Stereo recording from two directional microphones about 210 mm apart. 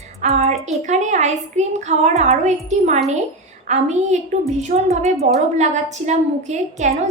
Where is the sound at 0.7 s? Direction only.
35° right (ahead or behind).